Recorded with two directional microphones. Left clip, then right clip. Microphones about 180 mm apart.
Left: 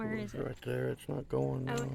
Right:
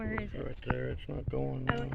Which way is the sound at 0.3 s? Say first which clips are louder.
Even; 65° left (ahead or behind).